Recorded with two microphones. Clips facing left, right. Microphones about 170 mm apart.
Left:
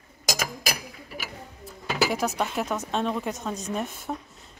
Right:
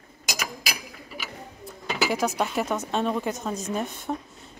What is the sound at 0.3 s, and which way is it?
Mechanisms, 45° left (ahead or behind).